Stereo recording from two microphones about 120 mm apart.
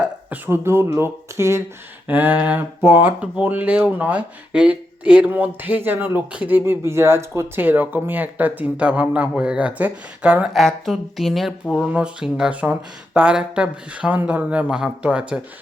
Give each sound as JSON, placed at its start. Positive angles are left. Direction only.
{"t": 0.0, "sound": "speech", "side_deg": -15}